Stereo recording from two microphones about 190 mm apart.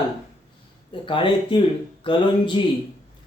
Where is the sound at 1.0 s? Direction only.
25° left (ahead or behind).